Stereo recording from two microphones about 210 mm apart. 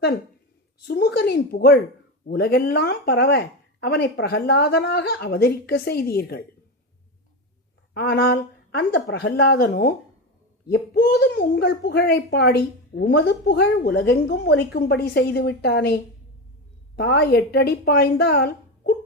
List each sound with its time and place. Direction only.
0.9 s a child's voice: 50° left (ahead or behind)
7.9 s a child's voice: 50° left (ahead or behind)